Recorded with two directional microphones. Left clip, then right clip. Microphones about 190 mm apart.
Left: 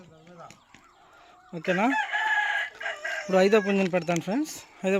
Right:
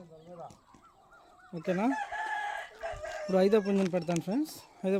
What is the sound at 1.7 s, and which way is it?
Speech, centre (ahead or behind).